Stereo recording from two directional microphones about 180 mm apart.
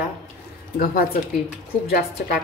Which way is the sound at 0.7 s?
55° left (ahead or behind).